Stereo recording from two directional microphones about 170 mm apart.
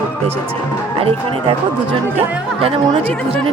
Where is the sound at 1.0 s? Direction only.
35° right (ahead or behind).